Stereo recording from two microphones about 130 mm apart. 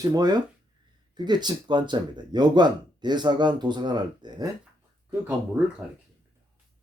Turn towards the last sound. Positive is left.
turn(degrees=-10)  # may be behind; listen again after turning